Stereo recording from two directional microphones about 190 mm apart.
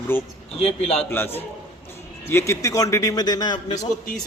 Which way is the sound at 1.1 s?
10° left (ahead or behind).